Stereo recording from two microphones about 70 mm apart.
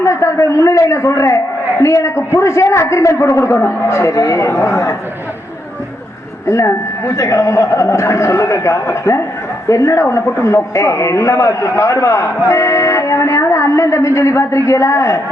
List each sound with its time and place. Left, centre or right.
0.0 s a man's voice: left
6.5 s a man's voice: left